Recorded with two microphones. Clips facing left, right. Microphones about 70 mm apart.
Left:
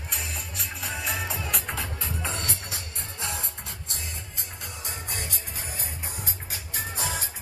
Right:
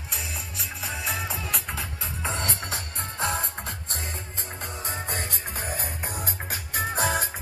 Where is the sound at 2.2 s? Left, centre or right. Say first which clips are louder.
Right 4 dB; right.